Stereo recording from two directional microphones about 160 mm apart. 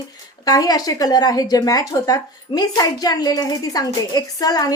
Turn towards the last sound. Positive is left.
turn(degrees=25)  # may be behind; listen again after turning